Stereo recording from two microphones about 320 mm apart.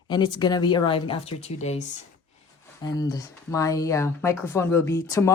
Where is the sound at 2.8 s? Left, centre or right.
Centre.